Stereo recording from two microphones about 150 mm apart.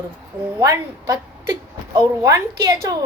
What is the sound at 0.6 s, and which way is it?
A woman's voice, 20° right (ahead or behind).